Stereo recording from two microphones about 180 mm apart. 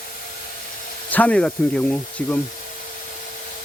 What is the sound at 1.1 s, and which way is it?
Speech, 5° left (ahead or behind).